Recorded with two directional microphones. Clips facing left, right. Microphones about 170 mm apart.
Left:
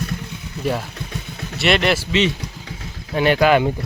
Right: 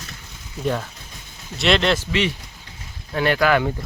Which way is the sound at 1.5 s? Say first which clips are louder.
Left 1 dB; 5° left (ahead or behind).